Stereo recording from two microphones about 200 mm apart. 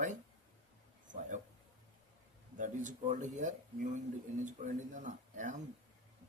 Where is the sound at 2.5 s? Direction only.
40° right (ahead or behind).